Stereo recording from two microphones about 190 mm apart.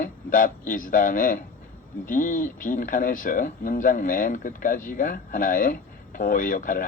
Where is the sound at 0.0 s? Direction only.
45° left (ahead or behind).